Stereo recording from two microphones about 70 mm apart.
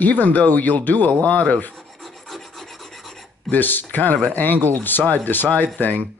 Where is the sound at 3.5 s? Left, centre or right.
Left.